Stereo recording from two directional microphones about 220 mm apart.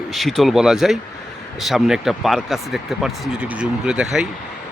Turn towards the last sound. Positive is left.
turn(degrees=-5)  # may be behind; listen again after turning